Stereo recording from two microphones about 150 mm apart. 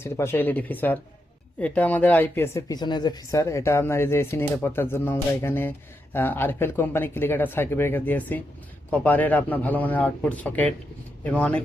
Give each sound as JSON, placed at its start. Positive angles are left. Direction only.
{"t": 0.0, "sound": "speech", "side_deg": 15}